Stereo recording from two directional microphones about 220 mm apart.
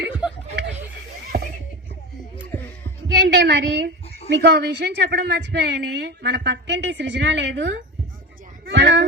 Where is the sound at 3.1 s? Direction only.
50° right (ahead or behind).